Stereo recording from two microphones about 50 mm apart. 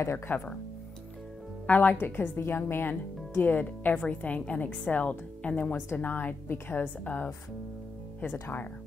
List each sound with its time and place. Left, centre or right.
0.3 s speech: left
1.7 s speech: left